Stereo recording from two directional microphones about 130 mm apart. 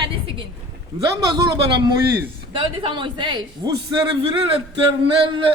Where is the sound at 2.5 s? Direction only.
40° right (ahead or behind).